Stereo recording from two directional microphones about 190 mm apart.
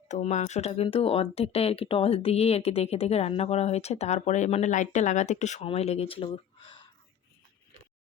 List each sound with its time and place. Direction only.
0.1 s speech: 40° left (ahead or behind)